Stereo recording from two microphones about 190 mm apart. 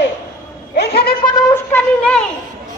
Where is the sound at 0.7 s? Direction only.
60° left (ahead or behind).